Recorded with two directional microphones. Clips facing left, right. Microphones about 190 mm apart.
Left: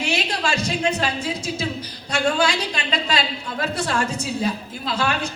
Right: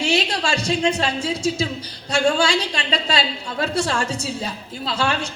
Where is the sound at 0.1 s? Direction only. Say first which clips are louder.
Right 1 dB; 30° right (ahead or behind).